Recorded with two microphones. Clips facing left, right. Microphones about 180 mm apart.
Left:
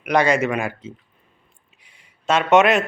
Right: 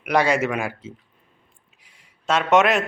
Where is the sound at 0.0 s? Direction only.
5° right (ahead or behind).